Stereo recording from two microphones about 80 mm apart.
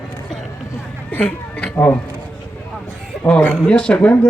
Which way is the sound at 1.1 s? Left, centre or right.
Centre.